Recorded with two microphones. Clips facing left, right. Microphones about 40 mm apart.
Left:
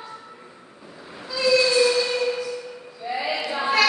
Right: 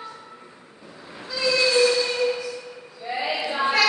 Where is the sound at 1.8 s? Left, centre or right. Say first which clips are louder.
Even; centre.